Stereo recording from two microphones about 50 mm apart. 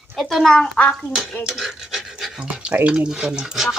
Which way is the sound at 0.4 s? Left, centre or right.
Centre.